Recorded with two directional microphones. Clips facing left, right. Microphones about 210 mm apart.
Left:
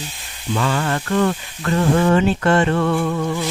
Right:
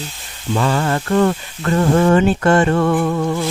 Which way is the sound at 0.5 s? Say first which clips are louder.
Right 3 dB; 35° right (ahead or behind).